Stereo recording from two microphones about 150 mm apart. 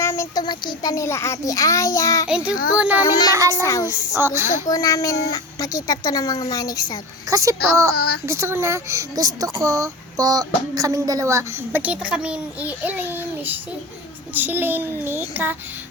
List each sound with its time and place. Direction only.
0.0 s a sound: 20° left (ahead or behind)
0.4 s speech: 30° left (ahead or behind)
2.3 s speech: 5° right (ahead or behind)
2.7 s a sound: 5° right (ahead or behind)
3.0 s speech: 25° left (ahead or behind)
3.3 s a child's voice: 20° right (ahead or behind)
3.6 s speech: 20° left (ahead or behind)
4.4 s a child's voice: 55° left (ahead or behind)
4.7 s speech: 20° left (ahead or behind)
7.3 s a child's voice: 20° right (ahead or behind)
7.9 s speech: 90° left
8.3 s a child's voice: 15° right (ahead or behind)
14.3 s a sound: 15° right (ahead or behind)